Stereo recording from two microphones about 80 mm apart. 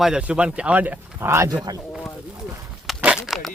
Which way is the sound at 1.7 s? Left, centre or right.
Right.